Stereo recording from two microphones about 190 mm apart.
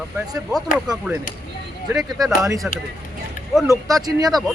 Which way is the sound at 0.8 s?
5° right (ahead or behind).